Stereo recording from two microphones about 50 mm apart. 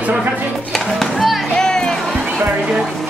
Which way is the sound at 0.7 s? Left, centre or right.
Centre.